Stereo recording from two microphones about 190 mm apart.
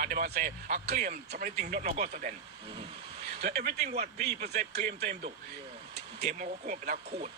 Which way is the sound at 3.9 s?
55° right (ahead or behind).